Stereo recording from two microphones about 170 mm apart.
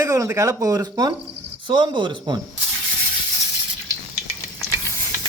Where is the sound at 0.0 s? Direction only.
20° right (ahead or behind).